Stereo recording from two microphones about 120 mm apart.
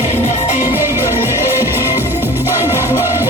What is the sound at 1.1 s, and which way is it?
Music, 20° right (ahead or behind).